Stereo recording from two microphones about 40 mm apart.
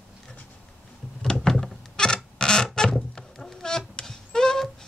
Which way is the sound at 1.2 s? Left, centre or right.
Centre.